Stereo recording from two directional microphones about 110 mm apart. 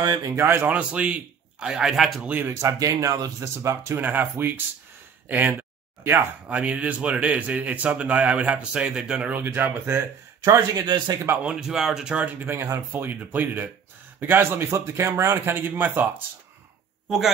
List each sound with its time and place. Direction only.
0.0 s speech: 40° right (ahead or behind)
0.4 s speech: 20° right (ahead or behind); by 2.2 s centre (ahead or behind)
2.2 s speech: 15° right (ahead or behind)
2.5 s speech: 30° right (ahead or behind)
5.3 s a sound: 15° right (ahead or behind)
6.5 s speech: 10° right (ahead or behind)
10.4 s speech: 35° right (ahead or behind)
11.4 s speech: 5° right (ahead or behind)